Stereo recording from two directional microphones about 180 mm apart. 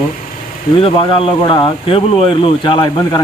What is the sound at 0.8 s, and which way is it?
Speech, 30° left (ahead or behind).